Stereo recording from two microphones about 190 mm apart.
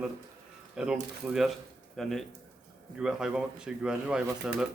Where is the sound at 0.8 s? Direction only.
5° right (ahead or behind).